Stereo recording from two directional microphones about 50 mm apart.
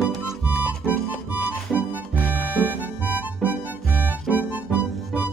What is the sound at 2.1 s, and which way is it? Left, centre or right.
Music, left.